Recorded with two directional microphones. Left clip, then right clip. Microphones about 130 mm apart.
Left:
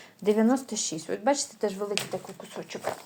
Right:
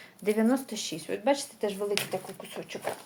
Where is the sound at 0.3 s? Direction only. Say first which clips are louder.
Left 3 dB; 30° left (ahead or behind).